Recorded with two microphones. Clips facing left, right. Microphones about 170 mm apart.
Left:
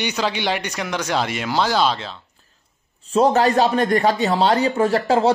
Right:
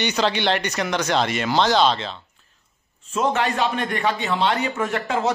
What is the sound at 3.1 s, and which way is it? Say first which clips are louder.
A man's voice: left 6 dB; 35° left (ahead or behind).